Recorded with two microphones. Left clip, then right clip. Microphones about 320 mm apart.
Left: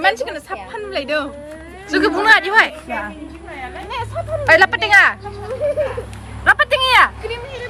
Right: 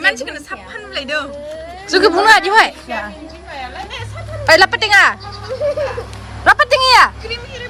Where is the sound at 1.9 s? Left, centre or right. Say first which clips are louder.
Right 3 dB; centre.